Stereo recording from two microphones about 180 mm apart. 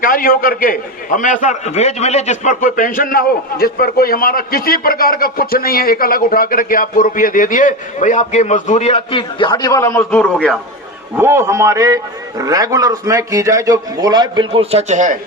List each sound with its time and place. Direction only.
0.0 s a man's voice: 50° left (ahead or behind); by 10.6 s 5° left (ahead or behind)
11.2 s a man's voice: 15° right (ahead or behind); by 15.2 s 45° right (ahead or behind)